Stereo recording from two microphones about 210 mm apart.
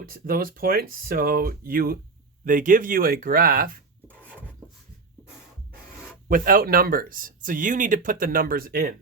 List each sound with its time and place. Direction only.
0.0 s speech: 45° right (ahead or behind)
6.2 s speech: 40° right (ahead or behind)